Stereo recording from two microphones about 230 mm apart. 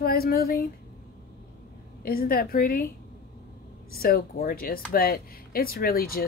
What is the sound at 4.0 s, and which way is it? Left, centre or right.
A woman's voice, left.